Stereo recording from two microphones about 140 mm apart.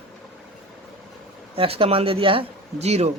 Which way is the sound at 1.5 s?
40° right (ahead or behind).